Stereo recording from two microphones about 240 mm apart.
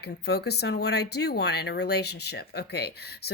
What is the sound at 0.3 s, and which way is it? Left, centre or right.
Speech, left.